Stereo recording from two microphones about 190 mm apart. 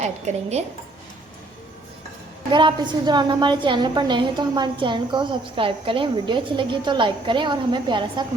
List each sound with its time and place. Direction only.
0.0 s a woman's voice: 35° right (ahead or behind)
2.5 s a woman's voice: 25° right (ahead or behind)